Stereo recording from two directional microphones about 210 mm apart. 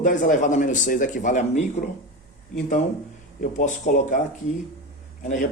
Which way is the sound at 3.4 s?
35° left (ahead or behind).